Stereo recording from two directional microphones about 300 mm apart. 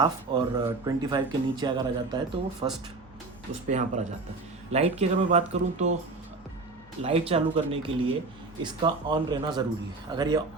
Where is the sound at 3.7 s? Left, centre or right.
Right.